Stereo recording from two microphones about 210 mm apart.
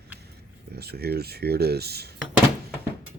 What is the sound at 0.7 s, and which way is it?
Speech, 50° right (ahead or behind).